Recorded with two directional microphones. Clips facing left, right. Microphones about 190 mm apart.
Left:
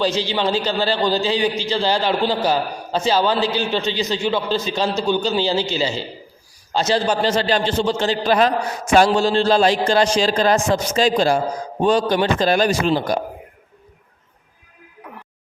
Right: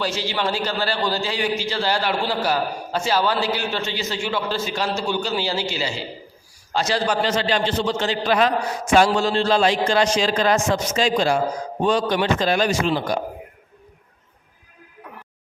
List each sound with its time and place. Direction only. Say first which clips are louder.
0.0 s a man's voice: left 4 dB; 20° left (ahead or behind); by 13.1 s 40° left (ahead or behind)